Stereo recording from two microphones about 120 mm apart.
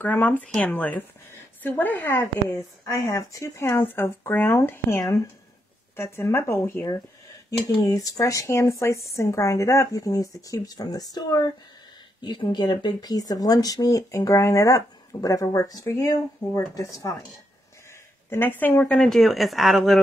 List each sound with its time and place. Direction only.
0.0 s speech: 15° left (ahead or behind); by 17.3 s 30° left (ahead or behind)
18.3 s speech: 15° left (ahead or behind); by 20.0 s centre (ahead or behind)